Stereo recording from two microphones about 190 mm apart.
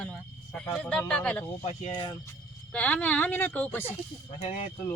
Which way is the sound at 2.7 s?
5° left (ahead or behind).